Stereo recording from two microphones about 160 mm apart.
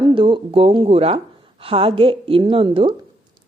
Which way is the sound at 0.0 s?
30° right (ahead or behind).